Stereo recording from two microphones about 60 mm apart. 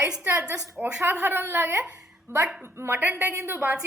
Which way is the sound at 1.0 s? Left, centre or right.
Right.